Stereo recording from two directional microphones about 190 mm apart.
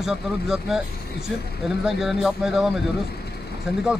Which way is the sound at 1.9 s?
Centre (ahead or behind).